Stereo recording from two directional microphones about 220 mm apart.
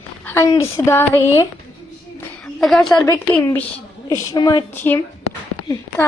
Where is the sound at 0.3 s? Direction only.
10° left (ahead or behind).